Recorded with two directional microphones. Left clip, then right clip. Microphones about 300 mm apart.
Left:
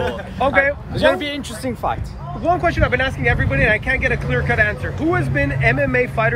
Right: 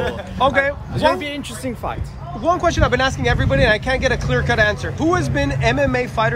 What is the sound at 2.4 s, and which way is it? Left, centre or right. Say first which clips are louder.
Speech: even; centre.